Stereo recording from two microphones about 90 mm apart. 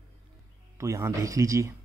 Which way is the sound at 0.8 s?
35° right (ahead or behind).